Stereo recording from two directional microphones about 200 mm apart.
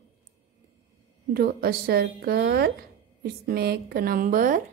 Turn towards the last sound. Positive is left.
turn(degrees=-45)  # may be behind; listen again after turning